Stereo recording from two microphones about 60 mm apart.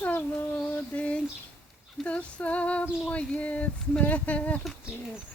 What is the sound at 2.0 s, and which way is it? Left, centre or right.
Female singing, left.